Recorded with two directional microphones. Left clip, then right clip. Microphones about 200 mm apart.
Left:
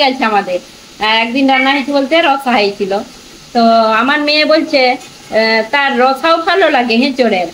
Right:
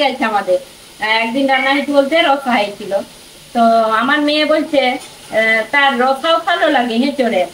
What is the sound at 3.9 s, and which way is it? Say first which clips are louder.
A woman's voice: left 3 dB; 50° left (ahead or behind).